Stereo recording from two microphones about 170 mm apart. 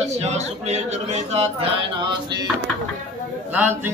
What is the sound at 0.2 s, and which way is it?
Speech, 40° right (ahead or behind).